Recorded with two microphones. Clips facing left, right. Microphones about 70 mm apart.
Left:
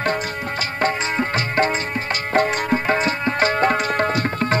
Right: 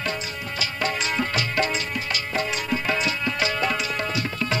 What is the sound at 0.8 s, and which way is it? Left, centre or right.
Music, left.